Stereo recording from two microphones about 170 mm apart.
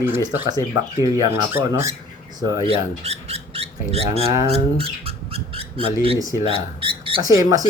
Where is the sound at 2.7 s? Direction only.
35° right (ahead or behind).